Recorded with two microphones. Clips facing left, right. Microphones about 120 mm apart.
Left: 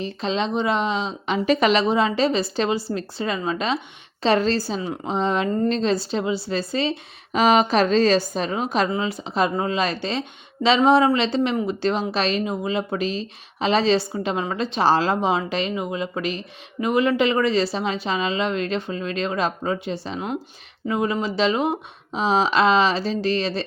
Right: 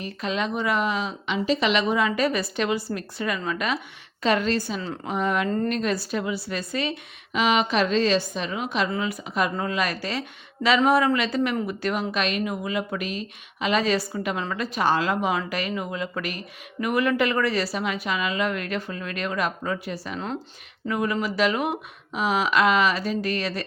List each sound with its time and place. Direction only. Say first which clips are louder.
0.0 s speech: left 3 dB; 25° left (ahead or behind)
1.5 s a woman's voice: left 4 dB; 45° left (ahead or behind)
1.8 s a woman's voice: left 3 dB; 30° left (ahead or behind)
8.9 s speech: left 3 dB; 30° left (ahead or behind)